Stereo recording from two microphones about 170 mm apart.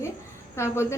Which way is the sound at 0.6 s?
15° left (ahead or behind).